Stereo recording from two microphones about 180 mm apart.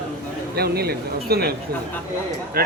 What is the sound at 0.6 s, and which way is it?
Speech, 60° right (ahead or behind).